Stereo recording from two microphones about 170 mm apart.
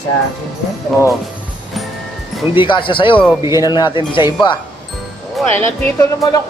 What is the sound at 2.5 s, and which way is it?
Speech, 30° left (ahead or behind).